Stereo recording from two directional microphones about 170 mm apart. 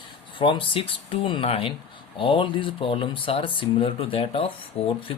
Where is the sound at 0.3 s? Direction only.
30° left (ahead or behind).